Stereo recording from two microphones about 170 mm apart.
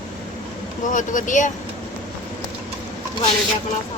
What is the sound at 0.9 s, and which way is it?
Speech, 50° left (ahead or behind).